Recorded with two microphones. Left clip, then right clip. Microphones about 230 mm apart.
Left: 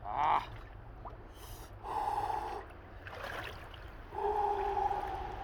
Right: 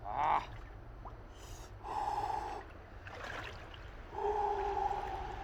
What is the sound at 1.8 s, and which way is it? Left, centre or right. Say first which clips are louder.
Gasp: left 2 dB; left.